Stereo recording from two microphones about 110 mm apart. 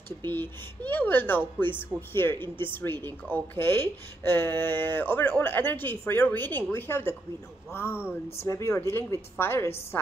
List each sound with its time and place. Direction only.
0.3 s speech: 20° left (ahead or behind)